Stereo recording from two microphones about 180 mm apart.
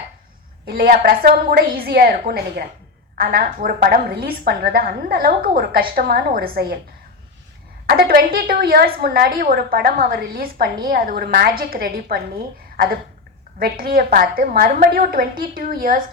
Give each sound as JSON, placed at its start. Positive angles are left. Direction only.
{"t": 0.6, "sound": "a woman's voice", "side_deg": -55}
{"t": 7.9, "sound": "a woman's voice", "side_deg": -60}
{"t": 12.7, "sound": "a sound", "side_deg": -55}
{"t": 13.6, "sound": "a woman's voice", "side_deg": -55}